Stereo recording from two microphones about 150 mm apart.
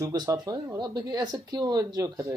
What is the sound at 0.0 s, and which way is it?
Speech, 25° right (ahead or behind).